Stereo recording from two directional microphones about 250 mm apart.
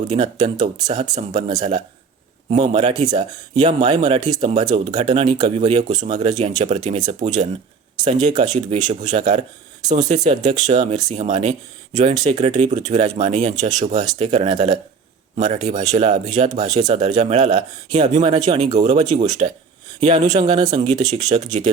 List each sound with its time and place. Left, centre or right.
0.2 s speech: centre
1.1 s speech: right
16.5 s speech: centre
16.7 s speech: right